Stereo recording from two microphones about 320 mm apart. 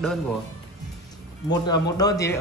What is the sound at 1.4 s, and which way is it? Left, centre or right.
Speech, centre.